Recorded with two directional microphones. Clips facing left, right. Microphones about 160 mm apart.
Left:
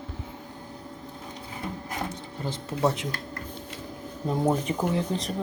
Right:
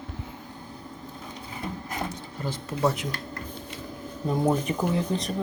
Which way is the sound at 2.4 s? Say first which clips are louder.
Even; 25° left (ahead or behind).